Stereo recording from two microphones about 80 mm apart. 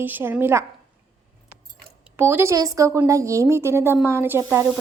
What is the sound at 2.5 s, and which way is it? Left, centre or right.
A woman's voice, right.